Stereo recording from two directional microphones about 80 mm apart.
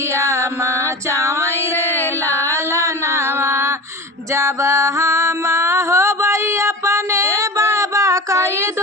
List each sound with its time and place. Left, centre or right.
0.1 s music: right
2.0 s music: left
2.5 s a sound: right
4.4 s music: right